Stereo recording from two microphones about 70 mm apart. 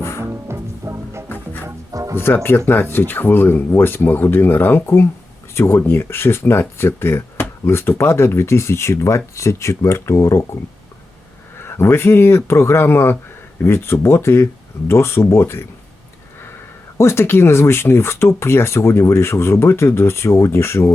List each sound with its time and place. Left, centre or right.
0.2 s music: right
1.9 s music: right
2.1 s speech: left
17.0 s speech: left